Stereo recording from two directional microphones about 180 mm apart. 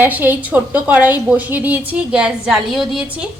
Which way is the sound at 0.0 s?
10° right (ahead or behind).